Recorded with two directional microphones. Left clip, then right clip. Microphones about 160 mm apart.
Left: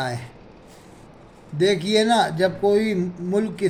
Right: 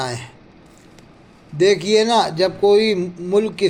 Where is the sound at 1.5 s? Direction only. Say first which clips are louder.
Right 5 dB; 30° right (ahead or behind).